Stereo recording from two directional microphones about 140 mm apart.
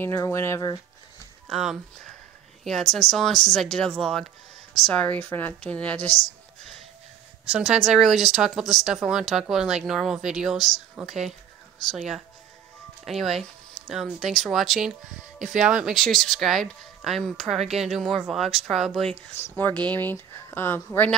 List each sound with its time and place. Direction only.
0.0 s a woman's voice: 15° left (ahead or behind)
1.5 s a woman's voice: centre (ahead or behind)
7.5 s speech: 5° right (ahead or behind)
19.3 s a woman's voice: 15° left (ahead or behind)